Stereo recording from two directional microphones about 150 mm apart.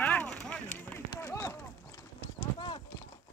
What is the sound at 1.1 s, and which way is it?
Clip-clop, 20° left (ahead or behind).